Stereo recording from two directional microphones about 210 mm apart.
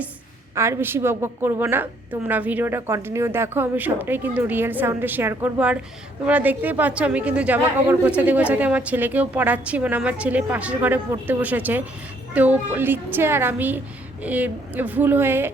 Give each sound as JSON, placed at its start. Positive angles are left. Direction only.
{"t": 0.5, "sound": "speech", "side_deg": -15}